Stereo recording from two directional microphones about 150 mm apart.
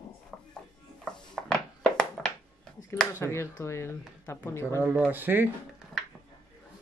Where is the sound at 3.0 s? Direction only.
15° left (ahead or behind).